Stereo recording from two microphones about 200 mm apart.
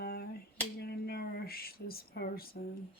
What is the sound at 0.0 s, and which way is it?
Finger snapping, 50° left (ahead or behind).